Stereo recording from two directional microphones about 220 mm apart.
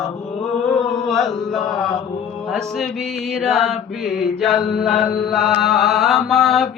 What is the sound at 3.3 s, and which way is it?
Mantra, centre (ahead or behind).